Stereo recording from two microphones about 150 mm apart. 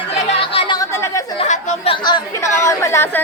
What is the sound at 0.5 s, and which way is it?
Chatter, 40° left (ahead or behind).